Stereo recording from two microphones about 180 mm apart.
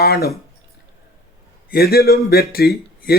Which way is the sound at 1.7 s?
60° left (ahead or behind).